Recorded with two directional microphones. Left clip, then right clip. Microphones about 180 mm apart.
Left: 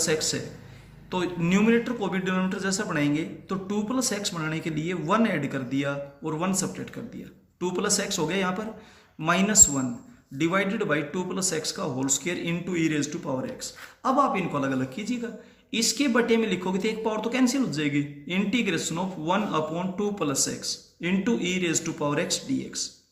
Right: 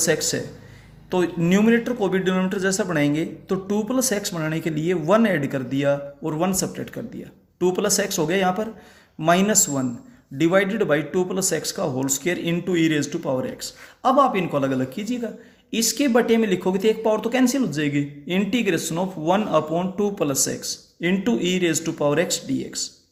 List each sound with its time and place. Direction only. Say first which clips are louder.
0.0 s speech: right 4 dB; 50° right (ahead or behind)